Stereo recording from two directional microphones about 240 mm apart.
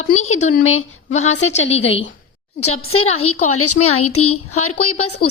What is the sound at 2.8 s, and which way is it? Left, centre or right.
A woman's voice, left.